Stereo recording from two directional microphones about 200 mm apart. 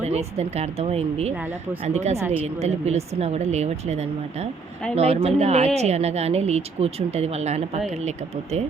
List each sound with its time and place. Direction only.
0.0 s speech: 30° right (ahead or behind)
2.1 s speech: 10° right (ahead or behind)
2.6 s speech: 35° right (ahead or behind)